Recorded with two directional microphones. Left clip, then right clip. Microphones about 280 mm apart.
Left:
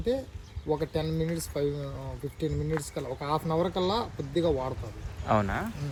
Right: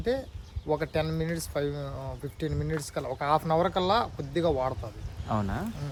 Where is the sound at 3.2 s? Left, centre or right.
Centre.